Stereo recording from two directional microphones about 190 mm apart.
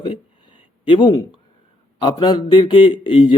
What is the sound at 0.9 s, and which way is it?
Speech, 25° left (ahead or behind).